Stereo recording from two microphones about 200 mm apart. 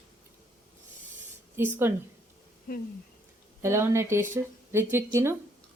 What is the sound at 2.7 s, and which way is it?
Speech, 45° left (ahead or behind).